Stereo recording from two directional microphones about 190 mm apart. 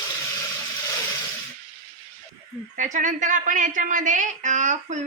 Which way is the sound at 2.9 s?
40° right (ahead or behind).